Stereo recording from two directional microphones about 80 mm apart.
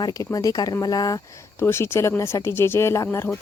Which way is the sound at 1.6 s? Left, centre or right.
Left.